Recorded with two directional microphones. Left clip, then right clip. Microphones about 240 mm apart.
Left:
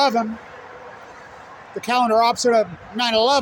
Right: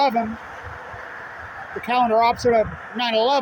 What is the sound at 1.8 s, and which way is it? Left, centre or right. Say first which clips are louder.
Speech: left 1 dB; left.